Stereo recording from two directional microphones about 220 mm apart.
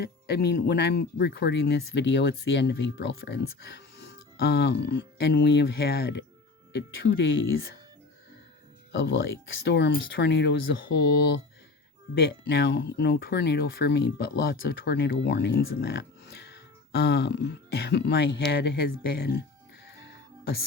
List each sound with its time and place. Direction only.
0.0 s speech: 45° left (ahead or behind)
8.9 s speech: 55° left (ahead or behind)